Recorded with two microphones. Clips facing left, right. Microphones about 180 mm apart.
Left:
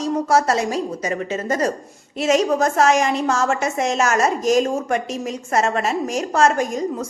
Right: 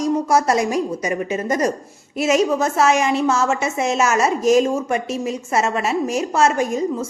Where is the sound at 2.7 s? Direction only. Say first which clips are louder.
Even; 5° right (ahead or behind).